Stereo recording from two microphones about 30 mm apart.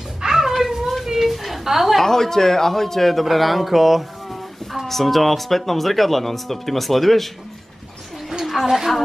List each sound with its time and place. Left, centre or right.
0.2 s a sound: centre
0.5 s children playing: centre
1.0 s a sound: centre
2.0 s a man's voice: centre
4.8 s speech: centre
8.6 s speech: centre